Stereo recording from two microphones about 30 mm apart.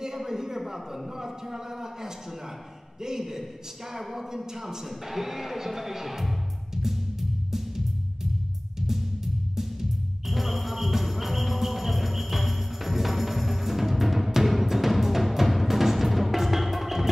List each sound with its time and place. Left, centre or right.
0.0 s a sound: centre
0.6 s a man's voice: centre
4.6 s music: centre